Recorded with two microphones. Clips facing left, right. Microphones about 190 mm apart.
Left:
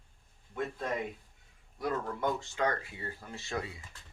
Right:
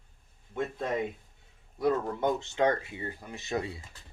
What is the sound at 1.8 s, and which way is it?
Speech, 25° right (ahead or behind).